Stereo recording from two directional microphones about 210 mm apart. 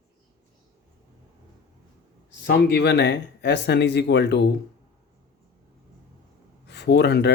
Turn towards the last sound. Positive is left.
turn(degrees=50)  # may be behind; listen again after turning